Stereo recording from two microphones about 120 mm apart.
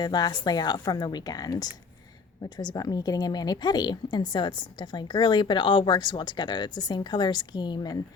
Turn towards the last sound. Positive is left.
turn(degrees=35)  # may be behind; listen again after turning